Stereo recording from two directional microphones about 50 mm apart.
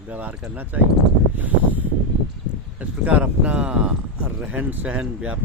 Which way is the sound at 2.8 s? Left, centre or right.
Right.